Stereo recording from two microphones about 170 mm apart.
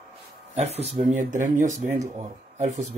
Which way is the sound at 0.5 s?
40° right (ahead or behind).